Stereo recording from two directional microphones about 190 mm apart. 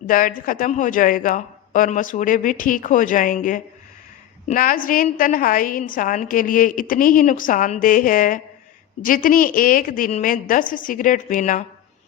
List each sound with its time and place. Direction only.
0.1 s a woman's voice: 45° left (ahead or behind)